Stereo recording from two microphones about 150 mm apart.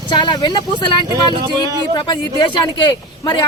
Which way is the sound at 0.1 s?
30° left (ahead or behind).